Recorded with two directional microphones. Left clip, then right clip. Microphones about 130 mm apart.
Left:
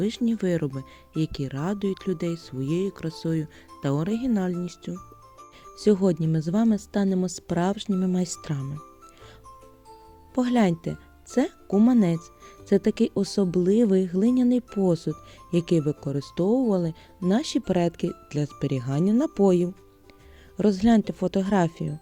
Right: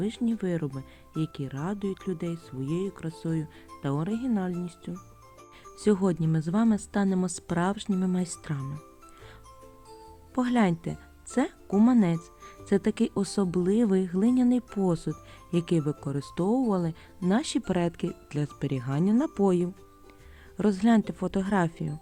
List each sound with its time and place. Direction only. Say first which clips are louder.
0.0 s speech: left 4 dB; 45° left (ahead or behind)
5.6 s speech: left 4 dB; 20° left (ahead or behind)
10.3 s speech: left 3 dB; 25° left (ahead or behind)